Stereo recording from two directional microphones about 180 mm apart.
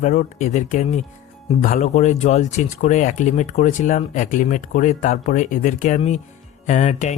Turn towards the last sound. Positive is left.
turn(degrees=40)  # may be behind; listen again after turning